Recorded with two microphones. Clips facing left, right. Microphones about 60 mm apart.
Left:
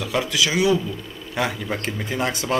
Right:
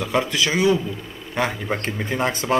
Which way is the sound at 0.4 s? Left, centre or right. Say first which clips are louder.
Left 3 dB; centre.